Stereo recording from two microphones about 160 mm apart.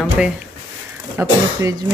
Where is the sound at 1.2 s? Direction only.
20° right (ahead or behind).